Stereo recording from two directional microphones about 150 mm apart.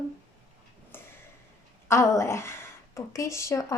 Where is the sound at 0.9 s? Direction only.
15° left (ahead or behind).